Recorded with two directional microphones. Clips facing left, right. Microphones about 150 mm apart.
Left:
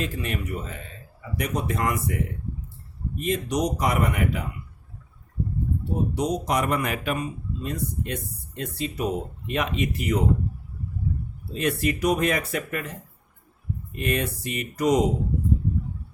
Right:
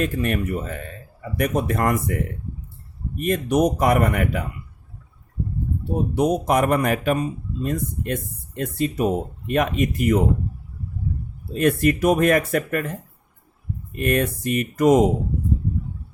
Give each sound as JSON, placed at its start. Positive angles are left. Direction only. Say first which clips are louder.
{"t": 0.0, "sound": "speech", "louder": "right 7 dB", "side_deg": -50}
{"t": 6.1, "sound": "speech", "louder": "right 7 dB", "side_deg": -55}
{"t": 11.5, "sound": "speech", "louder": "right 6 dB", "side_deg": -50}
{"t": 14.0, "sound": "speech", "louder": "right 6 dB", "side_deg": -50}